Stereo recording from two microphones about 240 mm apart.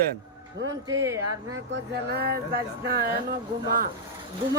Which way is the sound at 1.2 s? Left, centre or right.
Right.